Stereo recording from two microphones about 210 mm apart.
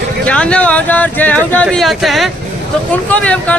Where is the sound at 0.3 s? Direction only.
5° left (ahead or behind).